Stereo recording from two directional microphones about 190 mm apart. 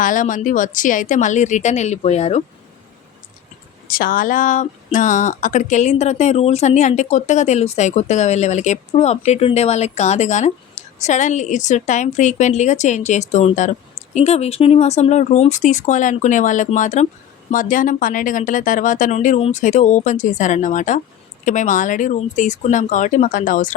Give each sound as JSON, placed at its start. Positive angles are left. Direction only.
{"t": 0.0, "sound": "speech", "side_deg": 45}
{"t": 3.8, "sound": "speech", "side_deg": 50}